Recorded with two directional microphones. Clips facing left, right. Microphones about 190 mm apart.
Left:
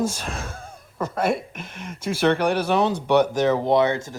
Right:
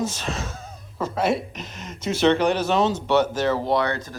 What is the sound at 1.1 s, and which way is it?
Speech, 55° left (ahead or behind).